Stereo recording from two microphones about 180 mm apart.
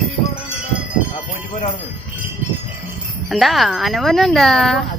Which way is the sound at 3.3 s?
Centre (ahead or behind).